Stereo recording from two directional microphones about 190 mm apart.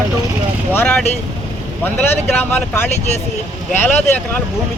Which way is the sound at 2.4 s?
10° left (ahead or behind).